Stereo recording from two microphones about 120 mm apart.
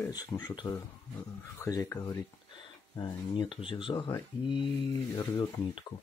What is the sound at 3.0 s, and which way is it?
Speech, 45° left (ahead or behind).